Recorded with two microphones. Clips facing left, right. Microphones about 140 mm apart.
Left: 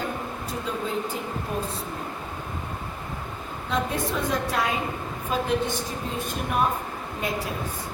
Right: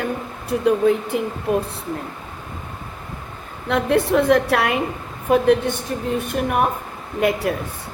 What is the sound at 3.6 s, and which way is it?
A woman's voice, 65° right (ahead or behind).